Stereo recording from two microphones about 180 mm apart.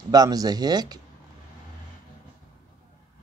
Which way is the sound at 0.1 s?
20° right (ahead or behind).